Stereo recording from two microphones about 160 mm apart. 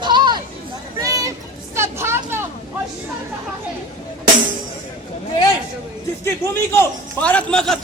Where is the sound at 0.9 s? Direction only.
20° right (ahead or behind).